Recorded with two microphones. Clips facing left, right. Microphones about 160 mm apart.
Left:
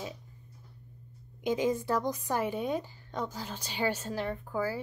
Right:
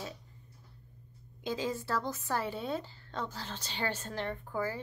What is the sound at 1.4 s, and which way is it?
A woman's voice, 20° left (ahead or behind).